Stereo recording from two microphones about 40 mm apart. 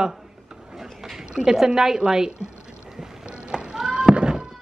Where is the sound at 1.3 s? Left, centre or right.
Centre.